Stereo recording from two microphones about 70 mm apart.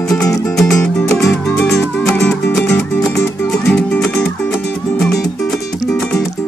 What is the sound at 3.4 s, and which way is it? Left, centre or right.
Music, centre.